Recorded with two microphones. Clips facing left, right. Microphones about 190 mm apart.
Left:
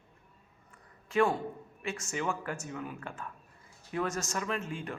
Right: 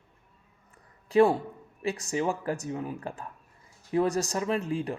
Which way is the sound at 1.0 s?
35° right (ahead or behind).